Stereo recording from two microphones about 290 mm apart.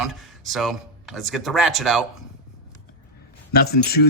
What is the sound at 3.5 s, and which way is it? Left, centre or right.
Speech, left.